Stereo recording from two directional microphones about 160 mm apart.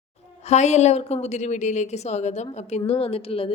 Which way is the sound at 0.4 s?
45° left (ahead or behind).